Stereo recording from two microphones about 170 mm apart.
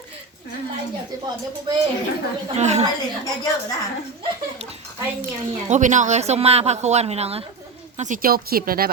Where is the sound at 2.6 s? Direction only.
40° right (ahead or behind).